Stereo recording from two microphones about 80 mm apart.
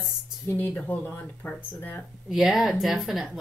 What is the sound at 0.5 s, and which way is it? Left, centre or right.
Speech, left.